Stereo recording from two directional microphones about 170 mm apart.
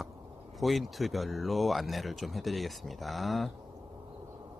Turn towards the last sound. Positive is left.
turn(degrees=0)  # may be behind; listen again after turning